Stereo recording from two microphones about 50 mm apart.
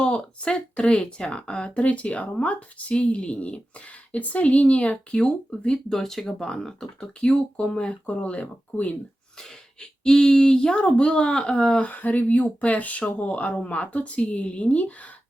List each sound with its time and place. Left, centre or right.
0.0 s a woman's voice: left
9.4 s speech: centre
11.9 s a woman's voice: left